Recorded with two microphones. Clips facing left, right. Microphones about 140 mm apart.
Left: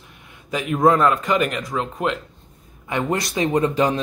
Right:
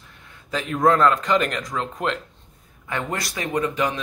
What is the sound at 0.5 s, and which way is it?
Speech, 15° left (ahead or behind).